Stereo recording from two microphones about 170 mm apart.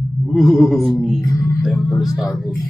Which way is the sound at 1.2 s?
20° left (ahead or behind).